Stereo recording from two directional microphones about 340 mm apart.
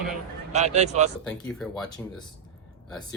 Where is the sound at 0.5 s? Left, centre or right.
Centre.